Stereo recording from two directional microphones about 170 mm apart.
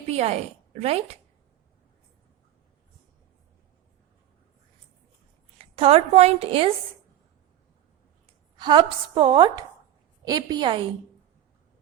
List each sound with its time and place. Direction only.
0.1 s speech: 40° right (ahead or behind)
5.5 s a woman's voice: 35° right (ahead or behind)
8.5 s a woman's voice: 25° right (ahead or behind)